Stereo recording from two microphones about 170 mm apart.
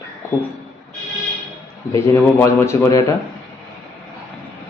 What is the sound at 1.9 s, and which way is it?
A man's voice, 15° left (ahead or behind).